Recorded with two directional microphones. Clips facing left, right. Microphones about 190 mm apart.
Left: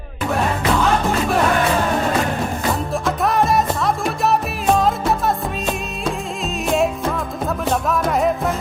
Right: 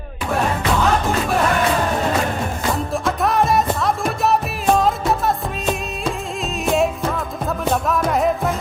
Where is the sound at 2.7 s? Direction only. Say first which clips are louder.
Right 1 dB; centre (ahead or behind).